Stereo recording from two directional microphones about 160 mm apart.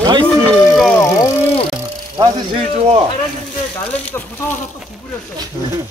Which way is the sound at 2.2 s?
30° right (ahead or behind).